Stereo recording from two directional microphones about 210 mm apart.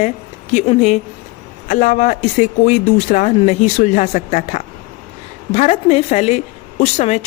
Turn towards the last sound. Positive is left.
turn(degrees=30)  # may be behind; listen again after turning